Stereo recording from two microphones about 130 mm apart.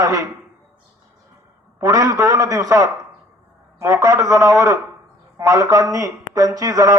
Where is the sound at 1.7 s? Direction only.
25° right (ahead or behind).